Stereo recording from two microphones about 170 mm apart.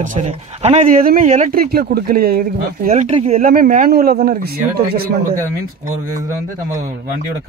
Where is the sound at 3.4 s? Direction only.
55° right (ahead or behind).